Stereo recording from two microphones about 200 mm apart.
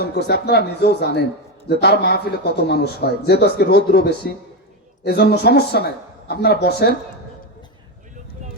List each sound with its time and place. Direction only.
0.0 s a man's voice: 50° left (ahead or behind)